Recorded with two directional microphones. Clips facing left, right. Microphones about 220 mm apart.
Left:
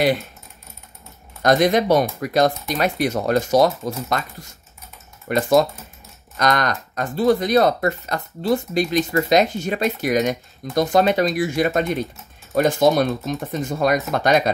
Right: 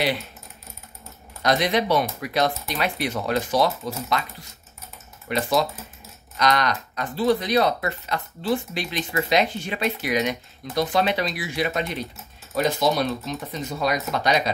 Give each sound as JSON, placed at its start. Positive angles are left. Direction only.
{"t": 1.4, "sound": "speech", "side_deg": 45}